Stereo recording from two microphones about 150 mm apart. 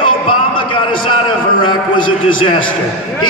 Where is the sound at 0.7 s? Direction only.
35° left (ahead or behind).